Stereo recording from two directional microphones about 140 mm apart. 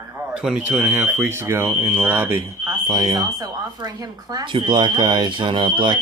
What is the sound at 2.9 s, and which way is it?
Speech, 30° right (ahead or behind).